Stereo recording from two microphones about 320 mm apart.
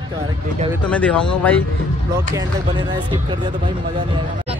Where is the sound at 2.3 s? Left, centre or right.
Centre.